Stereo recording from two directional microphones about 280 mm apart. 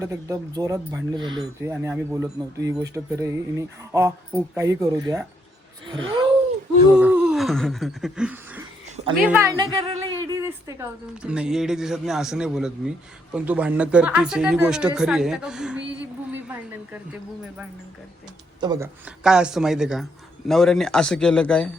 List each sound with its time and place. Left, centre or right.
0.0 s speech: centre
6.9 s a sound: centre
9.2 s a woman's voice: centre
18.6 s speech: centre